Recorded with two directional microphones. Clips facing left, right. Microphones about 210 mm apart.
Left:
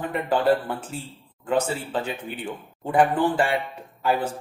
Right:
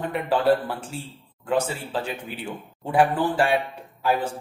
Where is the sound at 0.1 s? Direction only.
Centre (ahead or behind).